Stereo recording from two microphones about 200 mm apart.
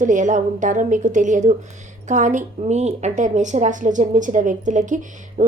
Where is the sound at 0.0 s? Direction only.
40° right (ahead or behind).